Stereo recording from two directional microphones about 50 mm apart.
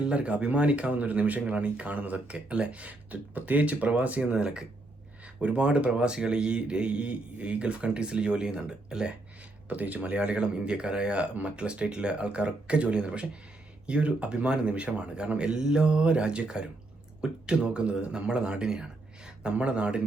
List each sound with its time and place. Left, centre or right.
0.0 s speech: right
9.6 s speech: right